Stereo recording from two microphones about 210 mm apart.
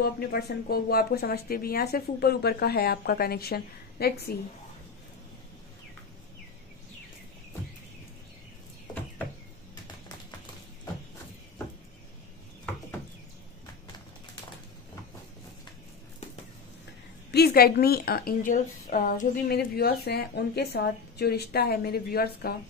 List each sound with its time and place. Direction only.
0.0 s a woman's voice: 45° left (ahead or behind)
17.3 s a woman's voice: 50° left (ahead or behind)